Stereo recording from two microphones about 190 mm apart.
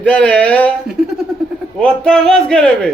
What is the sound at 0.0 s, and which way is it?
Speech, 5° left (ahead or behind).